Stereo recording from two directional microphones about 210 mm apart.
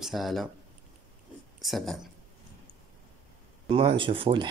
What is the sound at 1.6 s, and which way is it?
Speech, centre (ahead or behind).